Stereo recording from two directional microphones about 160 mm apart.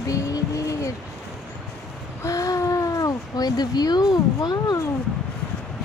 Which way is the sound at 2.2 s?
20° left (ahead or behind).